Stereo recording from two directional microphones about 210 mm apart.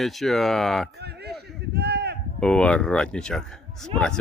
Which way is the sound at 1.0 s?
50° right (ahead or behind).